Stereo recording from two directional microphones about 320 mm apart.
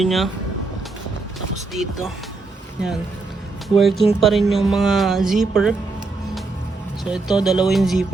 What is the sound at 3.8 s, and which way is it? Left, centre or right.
Speech, centre.